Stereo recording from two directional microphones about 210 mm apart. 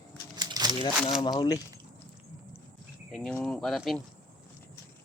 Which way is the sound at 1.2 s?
20° left (ahead or behind).